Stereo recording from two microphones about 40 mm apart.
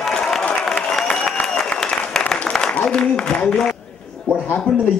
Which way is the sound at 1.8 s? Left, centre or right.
Left.